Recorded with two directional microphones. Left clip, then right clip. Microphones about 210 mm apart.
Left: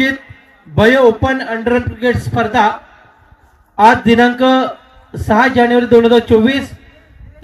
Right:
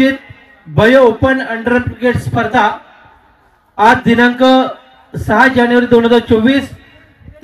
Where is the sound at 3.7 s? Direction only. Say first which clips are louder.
Even; 45° left (ahead or behind).